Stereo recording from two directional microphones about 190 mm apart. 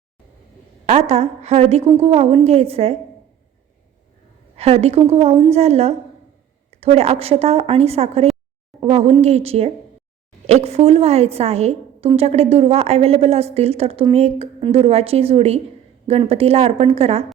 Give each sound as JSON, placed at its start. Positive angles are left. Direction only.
{"t": 0.9, "sound": "a woman's voice", "side_deg": -35}
{"t": 4.5, "sound": "a woman's voice", "side_deg": -35}